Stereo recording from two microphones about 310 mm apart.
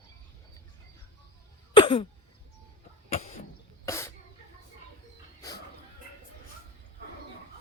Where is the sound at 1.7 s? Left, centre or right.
Centre.